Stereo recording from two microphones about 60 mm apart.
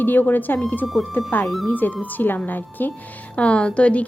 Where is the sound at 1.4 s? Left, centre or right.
Centre.